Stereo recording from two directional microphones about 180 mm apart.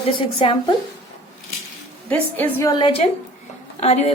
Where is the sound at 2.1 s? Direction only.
10° left (ahead or behind).